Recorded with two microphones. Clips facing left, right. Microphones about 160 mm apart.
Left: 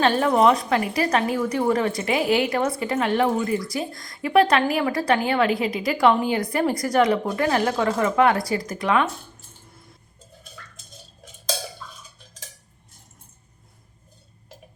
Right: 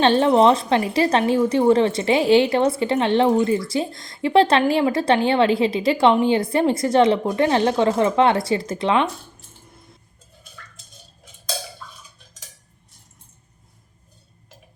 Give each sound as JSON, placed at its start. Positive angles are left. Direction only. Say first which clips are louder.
{"t": 0.0, "sound": "speech", "louder": "right 3 dB", "side_deg": -25}